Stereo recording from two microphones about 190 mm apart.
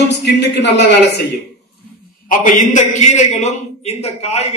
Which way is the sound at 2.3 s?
45° left (ahead or behind).